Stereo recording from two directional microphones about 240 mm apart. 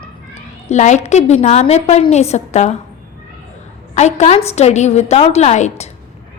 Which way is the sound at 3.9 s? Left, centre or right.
Left.